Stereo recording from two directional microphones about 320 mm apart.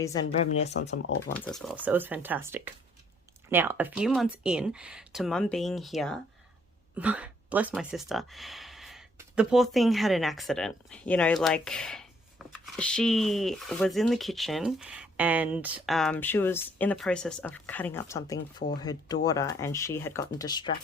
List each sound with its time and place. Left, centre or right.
0.0 s speech: centre
0.7 s speech: left
1.3 s speech: centre
18.3 s speech: left
18.8 s speech: centre